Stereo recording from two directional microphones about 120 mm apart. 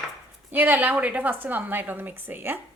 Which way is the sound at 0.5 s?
15° right (ahead or behind).